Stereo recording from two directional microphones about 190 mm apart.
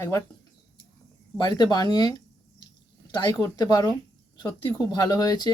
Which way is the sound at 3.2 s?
20° left (ahead or behind).